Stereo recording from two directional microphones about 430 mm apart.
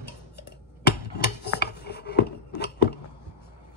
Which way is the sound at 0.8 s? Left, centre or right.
Left.